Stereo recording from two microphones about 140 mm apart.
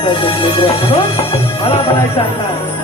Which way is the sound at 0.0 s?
40° left (ahead or behind).